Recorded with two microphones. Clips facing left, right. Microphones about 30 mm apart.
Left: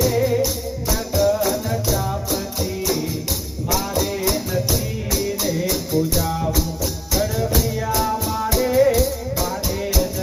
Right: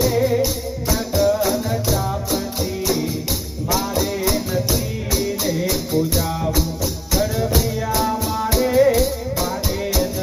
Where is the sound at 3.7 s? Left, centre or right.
Centre.